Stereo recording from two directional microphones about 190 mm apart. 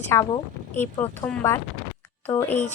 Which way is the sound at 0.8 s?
10° left (ahead or behind).